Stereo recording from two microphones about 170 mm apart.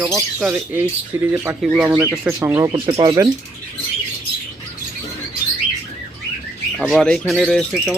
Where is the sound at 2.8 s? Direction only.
30° right (ahead or behind).